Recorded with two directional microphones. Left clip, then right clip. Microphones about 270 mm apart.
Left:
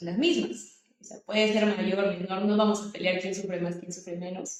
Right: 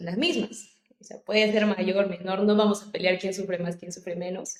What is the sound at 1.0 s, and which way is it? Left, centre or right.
A woman's voice, right.